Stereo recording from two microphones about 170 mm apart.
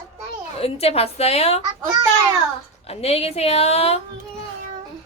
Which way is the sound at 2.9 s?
35° left (ahead or behind).